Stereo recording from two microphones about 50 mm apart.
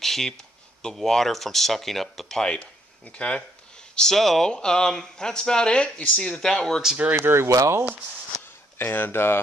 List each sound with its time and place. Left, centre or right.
0.0 s a sound: centre
0.9 s speech: centre
2.4 s speech: left
3.9 s speech: centre
7.2 s speech: right
7.4 s speech: right
8.7 s speech: left